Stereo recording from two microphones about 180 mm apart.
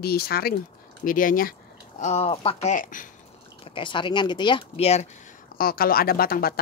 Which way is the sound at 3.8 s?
25° left (ahead or behind).